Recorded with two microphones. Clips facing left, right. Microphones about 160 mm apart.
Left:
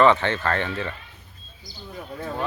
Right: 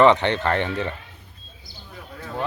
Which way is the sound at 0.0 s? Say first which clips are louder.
Right 2 dB; 20° right (ahead or behind).